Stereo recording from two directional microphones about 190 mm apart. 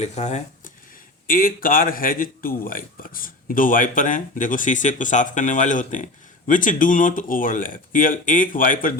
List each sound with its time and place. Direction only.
0.0 s speech: 35° left (ahead or behind)
1.3 s speech: 50° left (ahead or behind)